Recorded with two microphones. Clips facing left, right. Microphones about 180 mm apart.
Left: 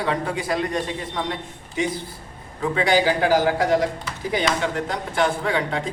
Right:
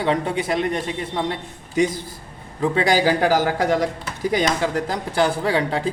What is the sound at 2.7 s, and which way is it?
A man's voice, 40° right (ahead or behind).